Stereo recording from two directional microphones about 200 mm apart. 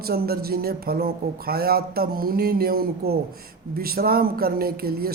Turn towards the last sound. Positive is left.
turn(degrees=-50)  # may be behind; listen again after turning